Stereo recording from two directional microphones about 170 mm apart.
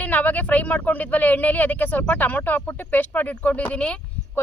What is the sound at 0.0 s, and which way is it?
Speech, 10° left (ahead or behind).